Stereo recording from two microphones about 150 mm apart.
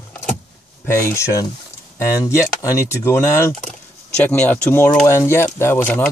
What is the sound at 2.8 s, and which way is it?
Speech, 15° left (ahead or behind).